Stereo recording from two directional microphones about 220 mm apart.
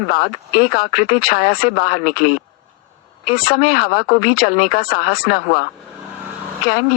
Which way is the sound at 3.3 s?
40° left (ahead or behind).